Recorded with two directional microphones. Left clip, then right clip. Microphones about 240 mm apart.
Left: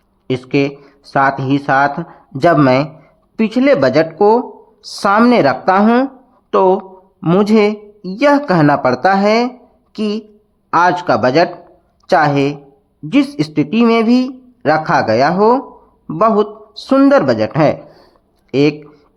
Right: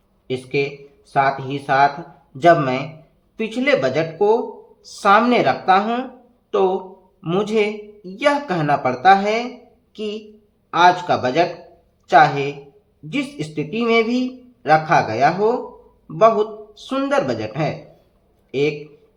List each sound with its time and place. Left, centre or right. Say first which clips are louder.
0.3 s speech: left 6 dB; left